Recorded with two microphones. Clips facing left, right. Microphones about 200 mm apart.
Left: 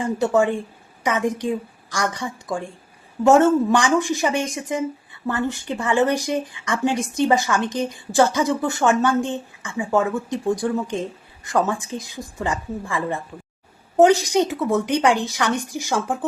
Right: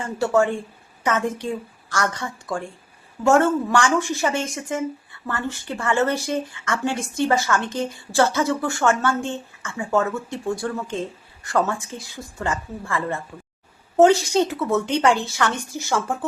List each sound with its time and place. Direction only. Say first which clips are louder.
0.0 s speech: left 1 dB; 15° left (ahead or behind)